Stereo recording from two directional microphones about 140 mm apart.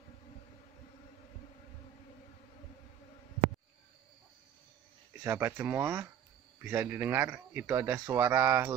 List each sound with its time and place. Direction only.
5.2 s speech: 15° right (ahead or behind)